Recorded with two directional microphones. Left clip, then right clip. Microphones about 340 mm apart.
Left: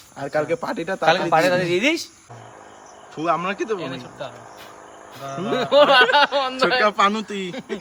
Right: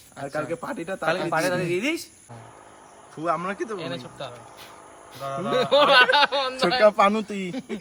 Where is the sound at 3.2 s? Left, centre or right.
Centre.